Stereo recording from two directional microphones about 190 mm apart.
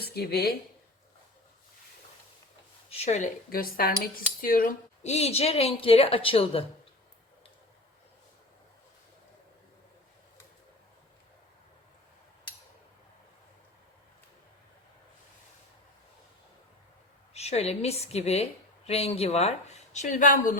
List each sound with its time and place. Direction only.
0.0 s speech: 55° left (ahead or behind)
2.9 s speech: 35° left (ahead or behind)
17.3 s speech: 35° left (ahead or behind)